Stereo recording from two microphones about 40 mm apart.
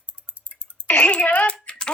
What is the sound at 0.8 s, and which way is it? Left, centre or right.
Speech, left.